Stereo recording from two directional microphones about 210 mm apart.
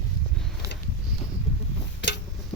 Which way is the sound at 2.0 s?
60° left (ahead or behind).